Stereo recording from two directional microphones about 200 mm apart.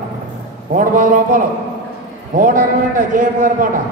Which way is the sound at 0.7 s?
40° right (ahead or behind).